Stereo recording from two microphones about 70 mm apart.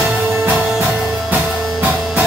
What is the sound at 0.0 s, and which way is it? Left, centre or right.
Music, centre.